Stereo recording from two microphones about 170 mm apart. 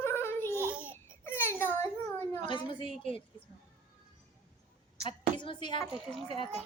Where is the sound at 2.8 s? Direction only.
45° right (ahead or behind).